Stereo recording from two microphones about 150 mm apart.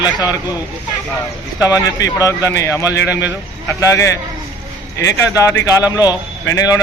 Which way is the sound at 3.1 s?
10° right (ahead or behind).